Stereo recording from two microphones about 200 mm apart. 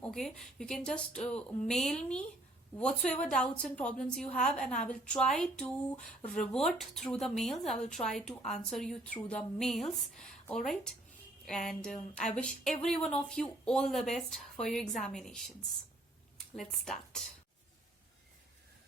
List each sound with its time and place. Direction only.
0.0 s a woman's voice: 5° left (ahead or behind)
16.6 s a woman's voice: centre (ahead or behind)